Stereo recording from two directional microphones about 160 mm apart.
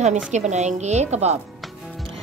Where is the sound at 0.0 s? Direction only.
45° right (ahead or behind).